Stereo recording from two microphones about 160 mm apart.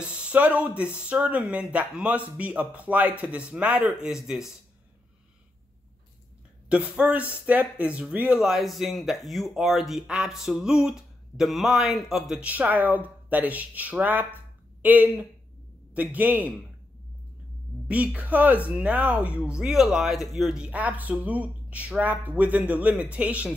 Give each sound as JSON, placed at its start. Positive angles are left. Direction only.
{"t": 0.0, "sound": "speech", "side_deg": -10}
{"t": 6.7, "sound": "speech", "side_deg": -10}
{"t": 17.8, "sound": "speech", "side_deg": -10}